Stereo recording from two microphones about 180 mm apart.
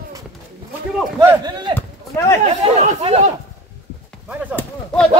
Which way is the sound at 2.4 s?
40° right (ahead or behind).